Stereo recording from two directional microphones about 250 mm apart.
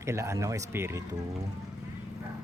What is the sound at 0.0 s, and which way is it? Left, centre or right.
Speech, centre.